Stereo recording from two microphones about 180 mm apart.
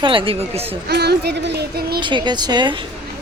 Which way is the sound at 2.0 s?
25° right (ahead or behind).